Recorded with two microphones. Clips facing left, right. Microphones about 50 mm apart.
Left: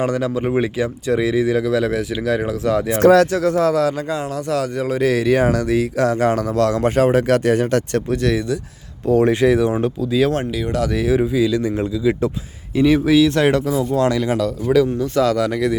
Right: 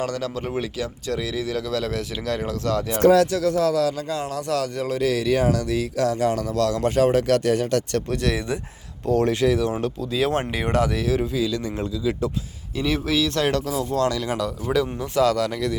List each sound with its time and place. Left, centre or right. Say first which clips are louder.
0.0 s speech: left 7 dB; centre
3.0 s speech: left 4 dB; left
3.3 s speech: left 4 dB; left
4.1 s speech: left 3 dB; centre
4.9 s speech: left 5 dB; left
8.1 s speech: left 6 dB; centre
9.0 s speech: left 5 dB; centre
10.0 s speech: left 6 dB; centre
10.4 s speech: left 2 dB; right
10.9 s speech: left 6 dB; centre
14.3 s speech: left 6 dB; centre
14.9 s a man's voice: left 6 dB; centre
15.2 s speech: left 2 dB; centre